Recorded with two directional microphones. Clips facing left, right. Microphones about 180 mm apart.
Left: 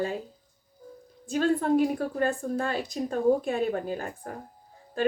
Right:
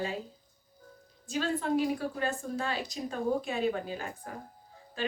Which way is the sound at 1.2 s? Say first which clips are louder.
Left 6 dB; 55° left (ahead or behind).